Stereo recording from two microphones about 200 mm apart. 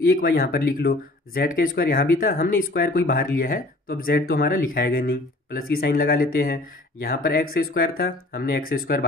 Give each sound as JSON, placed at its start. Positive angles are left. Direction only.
{"t": 0.0, "sound": "speech", "side_deg": 50}